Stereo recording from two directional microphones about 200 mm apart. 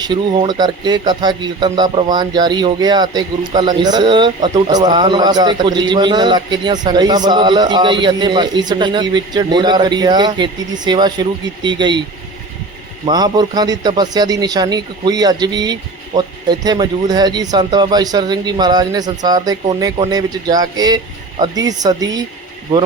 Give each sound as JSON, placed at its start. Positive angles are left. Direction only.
{"t": 0.0, "sound": "speech", "side_deg": -20}
{"t": 13.1, "sound": "speech", "side_deg": -20}